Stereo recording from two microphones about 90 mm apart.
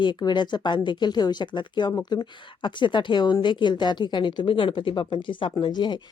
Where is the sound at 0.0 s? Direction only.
55° left (ahead or behind).